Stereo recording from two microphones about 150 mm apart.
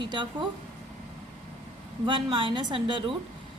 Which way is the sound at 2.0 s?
35° right (ahead or behind).